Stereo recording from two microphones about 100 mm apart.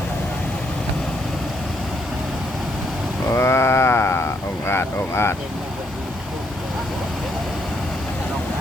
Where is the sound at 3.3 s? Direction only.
25° left (ahead or behind).